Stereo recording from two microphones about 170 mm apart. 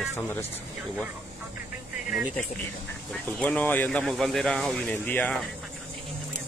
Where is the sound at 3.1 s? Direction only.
5° left (ahead or behind).